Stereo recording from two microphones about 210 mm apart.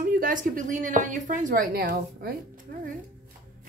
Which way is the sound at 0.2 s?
40° right (ahead or behind).